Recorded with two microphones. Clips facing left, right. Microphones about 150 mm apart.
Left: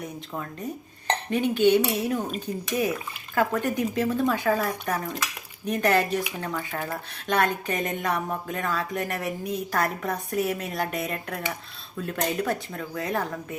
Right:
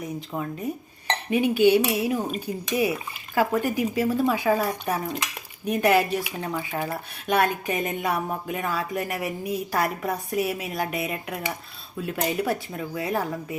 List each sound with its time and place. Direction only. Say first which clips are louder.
0.0 s speech: right 4 dB; 10° right (ahead or behind)